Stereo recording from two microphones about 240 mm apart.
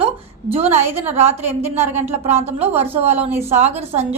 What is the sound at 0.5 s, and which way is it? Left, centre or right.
Speech, right.